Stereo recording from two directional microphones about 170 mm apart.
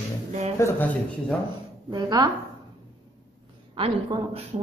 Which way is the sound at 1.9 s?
25° right (ahead or behind).